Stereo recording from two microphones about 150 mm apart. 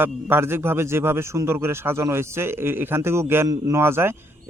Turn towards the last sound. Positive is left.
turn(degrees=-15)  # may be behind; listen again after turning